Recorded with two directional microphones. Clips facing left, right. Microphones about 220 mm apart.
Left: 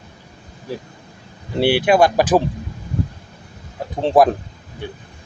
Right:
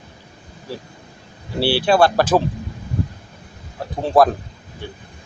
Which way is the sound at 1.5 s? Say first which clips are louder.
Left 2 dB; 20° left (ahead or behind).